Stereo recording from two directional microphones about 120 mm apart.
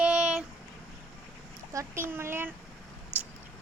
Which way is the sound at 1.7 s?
20° right (ahead or behind).